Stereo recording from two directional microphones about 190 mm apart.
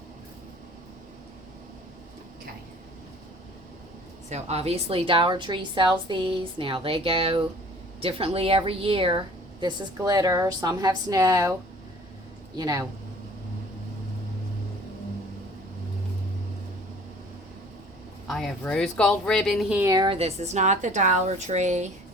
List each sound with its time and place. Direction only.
4.3 s a woman's voice: 35° right (ahead or behind); by 11.5 s 15° right (ahead or behind)
12.5 s a woman's voice: 20° right (ahead or behind)
18.3 s speech: centre (ahead or behind)
19.8 s a woman's voice: 20° right (ahead or behind); by 21.8 s 40° right (ahead or behind)